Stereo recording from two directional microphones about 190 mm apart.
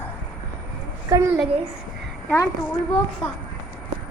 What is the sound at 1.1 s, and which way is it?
Speech, 15° right (ahead or behind).